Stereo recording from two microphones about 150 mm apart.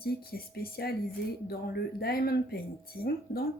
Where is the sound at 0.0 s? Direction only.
90° left.